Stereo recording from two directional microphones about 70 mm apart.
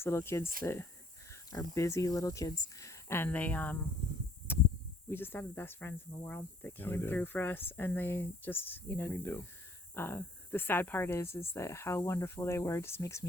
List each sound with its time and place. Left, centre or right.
0.0 s speech: left
1.3 s speech: left
3.2 s speech: left
4.5 s a sound: left
5.0 s speech: left